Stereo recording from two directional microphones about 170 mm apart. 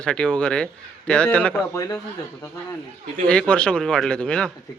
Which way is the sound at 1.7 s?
20° left (ahead or behind).